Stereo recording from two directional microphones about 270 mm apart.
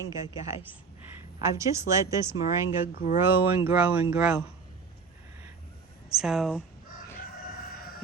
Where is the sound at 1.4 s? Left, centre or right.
Centre.